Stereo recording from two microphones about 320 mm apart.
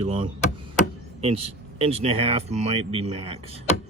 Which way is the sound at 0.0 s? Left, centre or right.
Centre.